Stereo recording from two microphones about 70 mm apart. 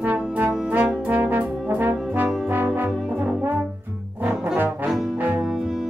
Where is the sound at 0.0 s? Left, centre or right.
Right.